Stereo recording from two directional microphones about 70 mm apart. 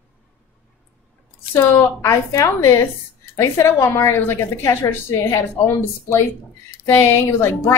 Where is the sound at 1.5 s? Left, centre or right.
Left.